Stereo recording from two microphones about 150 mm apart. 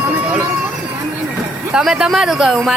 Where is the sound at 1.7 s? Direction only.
5° right (ahead or behind).